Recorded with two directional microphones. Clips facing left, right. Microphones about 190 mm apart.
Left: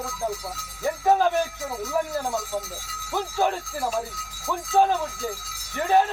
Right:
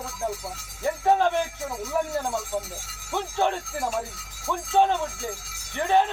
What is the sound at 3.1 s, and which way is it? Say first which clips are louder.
Speech: left 1 dB; 5° left (ahead or behind).